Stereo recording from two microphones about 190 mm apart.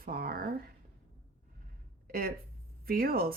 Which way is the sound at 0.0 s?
50° right (ahead or behind).